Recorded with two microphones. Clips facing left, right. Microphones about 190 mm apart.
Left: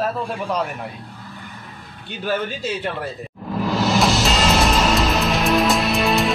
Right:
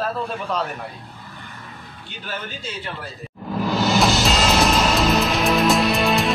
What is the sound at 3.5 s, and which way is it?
Music, centre (ahead or behind).